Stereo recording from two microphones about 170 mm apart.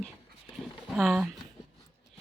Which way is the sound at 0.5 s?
Centre (ahead or behind).